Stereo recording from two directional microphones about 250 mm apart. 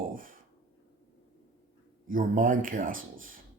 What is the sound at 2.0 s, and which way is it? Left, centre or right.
Speech, right.